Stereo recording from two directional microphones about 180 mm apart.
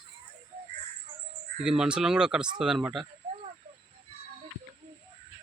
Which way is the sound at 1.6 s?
5° right (ahead or behind).